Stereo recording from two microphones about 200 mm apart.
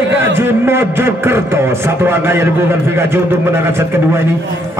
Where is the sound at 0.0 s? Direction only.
65° right (ahead or behind).